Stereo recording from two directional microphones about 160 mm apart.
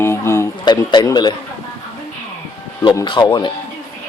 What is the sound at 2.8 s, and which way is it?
Speech, 30° left (ahead or behind).